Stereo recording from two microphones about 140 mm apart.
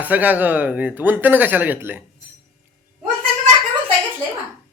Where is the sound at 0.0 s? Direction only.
10° right (ahead or behind).